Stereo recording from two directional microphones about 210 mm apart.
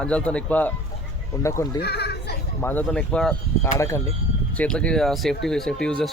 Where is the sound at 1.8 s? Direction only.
50° left (ahead or behind).